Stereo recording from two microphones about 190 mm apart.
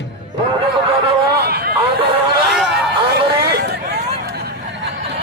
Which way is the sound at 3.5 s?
60° right (ahead or behind).